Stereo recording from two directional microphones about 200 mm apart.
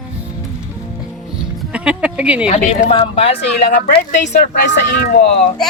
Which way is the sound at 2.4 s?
35° left (ahead or behind).